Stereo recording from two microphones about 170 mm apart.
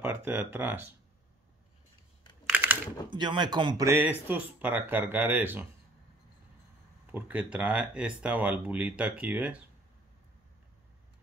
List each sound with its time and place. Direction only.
0.0 s speech: 10° right (ahead or behind)
2.5 s typing: 10° right (ahead or behind)
3.1 s speech: 25° right (ahead or behind); by 5.7 s 10° right (ahead or behind)
7.1 s speech: 10° right (ahead or behind)